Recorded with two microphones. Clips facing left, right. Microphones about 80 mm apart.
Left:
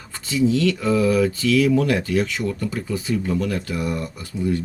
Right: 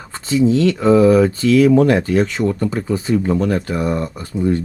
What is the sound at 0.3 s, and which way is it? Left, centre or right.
Speech, right.